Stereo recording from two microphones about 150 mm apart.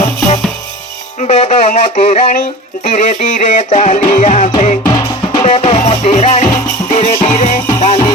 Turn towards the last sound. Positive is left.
turn(degrees=45)  # may be behind; listen again after turning